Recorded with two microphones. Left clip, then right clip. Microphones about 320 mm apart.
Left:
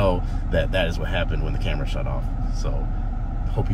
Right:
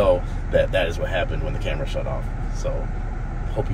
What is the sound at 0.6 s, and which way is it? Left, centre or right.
Speech, centre.